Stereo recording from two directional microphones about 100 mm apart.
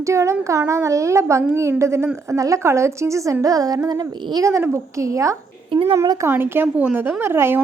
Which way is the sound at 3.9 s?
45° right (ahead or behind).